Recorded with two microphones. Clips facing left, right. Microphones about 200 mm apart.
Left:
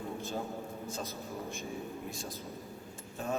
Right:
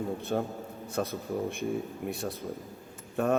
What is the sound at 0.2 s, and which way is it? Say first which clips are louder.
A man's voice: right 6 dB; 65° right (ahead or behind).